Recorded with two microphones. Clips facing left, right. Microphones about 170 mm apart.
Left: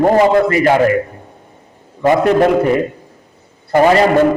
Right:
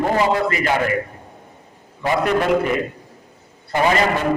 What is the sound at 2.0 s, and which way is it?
A man's voice, 45° left (ahead or behind).